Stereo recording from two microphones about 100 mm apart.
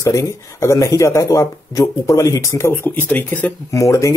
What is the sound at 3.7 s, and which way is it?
Speech, 30° left (ahead or behind).